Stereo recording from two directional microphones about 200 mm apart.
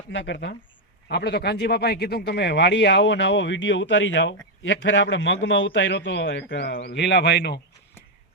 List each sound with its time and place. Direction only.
0.1 s a man's voice: 60° left (ahead or behind)